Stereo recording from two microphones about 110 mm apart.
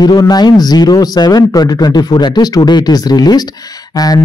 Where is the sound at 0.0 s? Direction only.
40° left (ahead or behind).